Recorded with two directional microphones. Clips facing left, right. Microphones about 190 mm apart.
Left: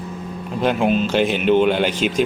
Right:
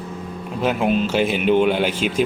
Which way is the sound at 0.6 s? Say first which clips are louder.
Left 1 dB; 5° right (ahead or behind).